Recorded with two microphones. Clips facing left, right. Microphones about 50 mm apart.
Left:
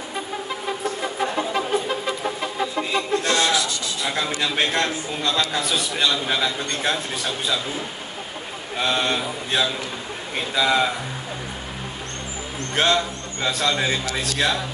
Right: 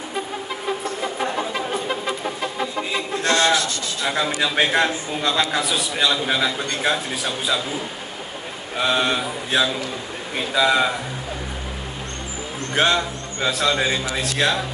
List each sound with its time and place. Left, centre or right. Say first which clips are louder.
3.3 s rub: right 7 dB; right
4.1 s a man's voice: right 3 dB; centre
8.7 s a man's voice: right 2 dB; centre
12.7 s a man's voice: right 1 dB; centre